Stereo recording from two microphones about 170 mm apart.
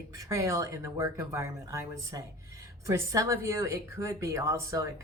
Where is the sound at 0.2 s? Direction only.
20° right (ahead or behind).